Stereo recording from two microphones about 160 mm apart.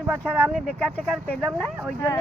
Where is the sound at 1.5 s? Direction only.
Centre (ahead or behind).